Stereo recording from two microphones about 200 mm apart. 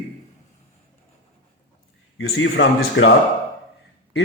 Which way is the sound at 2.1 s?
80° left.